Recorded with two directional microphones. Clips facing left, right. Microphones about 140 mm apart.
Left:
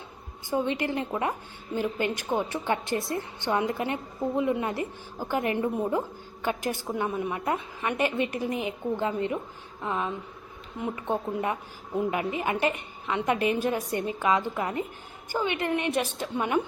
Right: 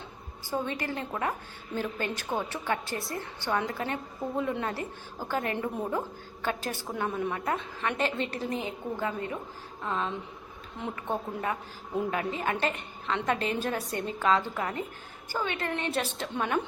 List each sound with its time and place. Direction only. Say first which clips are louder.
0.5 s a woman's voice: left 5 dB; 20° left (ahead or behind)